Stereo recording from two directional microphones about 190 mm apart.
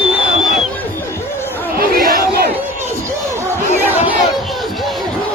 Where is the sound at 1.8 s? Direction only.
50° right (ahead or behind).